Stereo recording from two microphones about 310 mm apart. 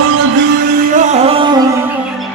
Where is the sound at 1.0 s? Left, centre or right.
Right.